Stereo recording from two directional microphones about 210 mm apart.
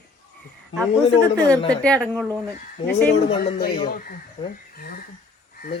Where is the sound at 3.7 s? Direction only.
45° left (ahead or behind).